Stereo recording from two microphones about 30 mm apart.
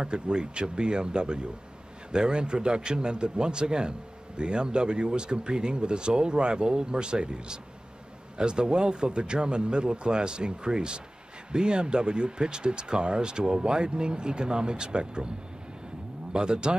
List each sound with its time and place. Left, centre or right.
0.0 s speech: right
16.3 s speech: right